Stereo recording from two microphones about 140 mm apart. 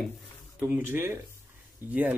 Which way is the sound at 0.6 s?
10° right (ahead or behind).